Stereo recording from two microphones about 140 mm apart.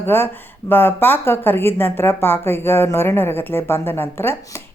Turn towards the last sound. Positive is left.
turn(degrees=15)  # may be behind; listen again after turning